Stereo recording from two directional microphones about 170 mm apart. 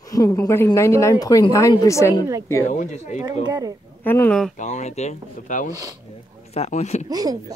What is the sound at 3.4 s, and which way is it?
Speech, 20° right (ahead or behind).